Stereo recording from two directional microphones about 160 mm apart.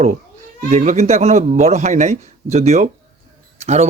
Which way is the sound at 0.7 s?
45° right (ahead or behind).